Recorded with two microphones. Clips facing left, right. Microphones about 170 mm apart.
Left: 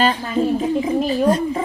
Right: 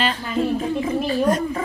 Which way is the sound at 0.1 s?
20° left (ahead or behind).